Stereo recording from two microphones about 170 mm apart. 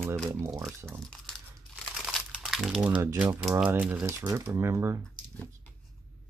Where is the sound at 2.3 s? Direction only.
Centre (ahead or behind).